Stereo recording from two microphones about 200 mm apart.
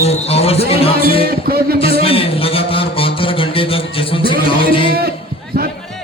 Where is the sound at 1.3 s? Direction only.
50° right (ahead or behind).